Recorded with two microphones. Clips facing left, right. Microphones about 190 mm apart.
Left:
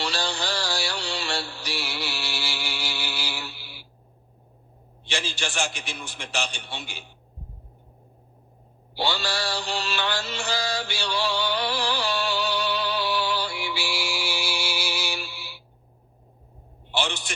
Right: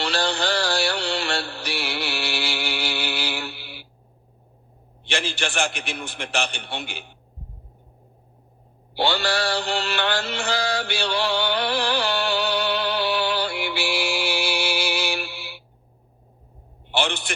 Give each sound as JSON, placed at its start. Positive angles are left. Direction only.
{"t": 0.0, "sound": "mantra", "side_deg": -60}
{"t": 5.0, "sound": "a man's voice", "side_deg": -60}
{"t": 9.0, "sound": "mantra", "side_deg": -60}
{"t": 16.9, "sound": "a sound", "side_deg": -60}